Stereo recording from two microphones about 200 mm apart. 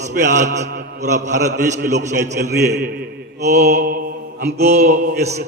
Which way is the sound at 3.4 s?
35° right (ahead or behind).